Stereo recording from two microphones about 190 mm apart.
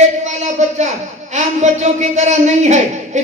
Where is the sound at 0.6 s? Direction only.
40° right (ahead or behind).